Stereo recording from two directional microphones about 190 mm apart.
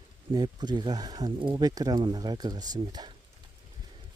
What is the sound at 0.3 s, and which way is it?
Speech, 20° right (ahead or behind).